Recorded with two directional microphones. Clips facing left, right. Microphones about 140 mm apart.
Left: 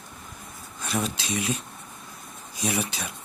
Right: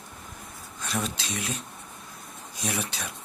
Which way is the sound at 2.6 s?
5° left (ahead or behind).